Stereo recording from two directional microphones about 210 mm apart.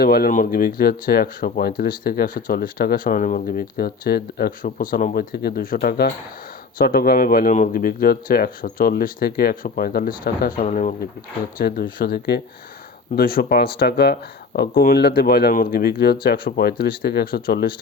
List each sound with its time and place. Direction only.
0.0 s speech: 45° left (ahead or behind)
5.3 s speech: 50° left (ahead or behind)